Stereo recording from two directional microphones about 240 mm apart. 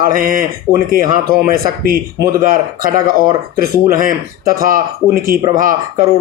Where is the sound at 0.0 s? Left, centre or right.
Right.